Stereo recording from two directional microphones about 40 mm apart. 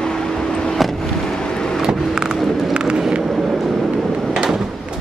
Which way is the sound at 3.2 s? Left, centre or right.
Centre.